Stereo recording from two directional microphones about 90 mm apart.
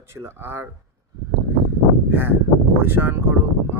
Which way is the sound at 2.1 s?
20° right (ahead or behind).